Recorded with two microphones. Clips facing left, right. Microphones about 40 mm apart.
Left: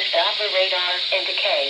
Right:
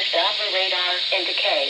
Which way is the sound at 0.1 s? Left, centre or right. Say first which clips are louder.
Left 3 dB; centre.